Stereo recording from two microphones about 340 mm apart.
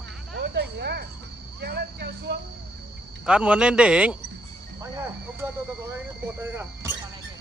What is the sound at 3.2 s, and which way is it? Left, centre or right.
Speech, centre.